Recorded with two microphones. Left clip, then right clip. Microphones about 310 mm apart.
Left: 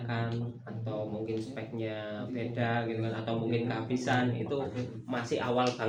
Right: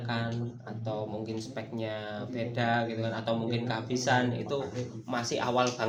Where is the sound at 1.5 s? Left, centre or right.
Right.